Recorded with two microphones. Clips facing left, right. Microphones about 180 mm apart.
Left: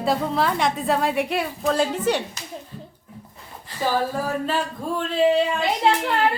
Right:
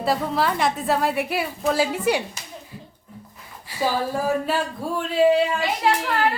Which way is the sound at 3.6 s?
10° right (ahead or behind).